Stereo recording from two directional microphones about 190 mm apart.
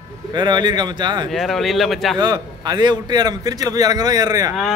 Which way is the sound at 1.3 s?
Centre (ahead or behind).